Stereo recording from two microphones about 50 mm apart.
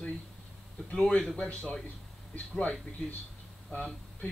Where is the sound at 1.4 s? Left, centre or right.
Left.